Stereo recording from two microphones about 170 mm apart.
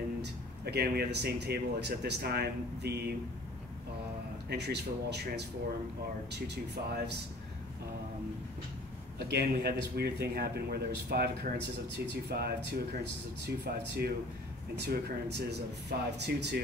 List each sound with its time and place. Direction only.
0.2 s speech: 70° right (ahead or behind)
4.5 s speech: 75° right (ahead or behind)
9.2 s speech: 70° right (ahead or behind)